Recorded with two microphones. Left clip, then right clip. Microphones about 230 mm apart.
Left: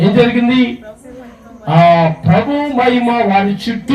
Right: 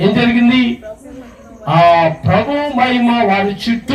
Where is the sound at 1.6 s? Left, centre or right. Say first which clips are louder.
Even; right.